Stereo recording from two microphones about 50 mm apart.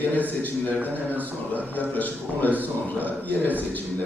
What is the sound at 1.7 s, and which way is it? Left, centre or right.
A man's voice, left.